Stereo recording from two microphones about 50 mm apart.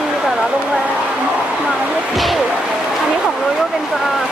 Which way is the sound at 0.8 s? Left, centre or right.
Right.